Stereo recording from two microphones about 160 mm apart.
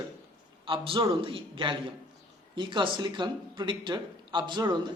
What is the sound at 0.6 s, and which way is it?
A man's voice, 35° right (ahead or behind).